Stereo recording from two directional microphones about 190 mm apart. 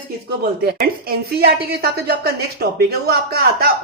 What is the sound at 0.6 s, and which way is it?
A woman's voice, 55° right (ahead or behind).